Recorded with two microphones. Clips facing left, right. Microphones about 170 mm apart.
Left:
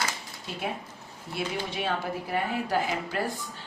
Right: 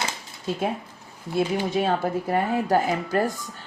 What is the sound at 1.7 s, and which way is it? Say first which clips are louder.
Speech: right 7 dB; 45° right (ahead or behind).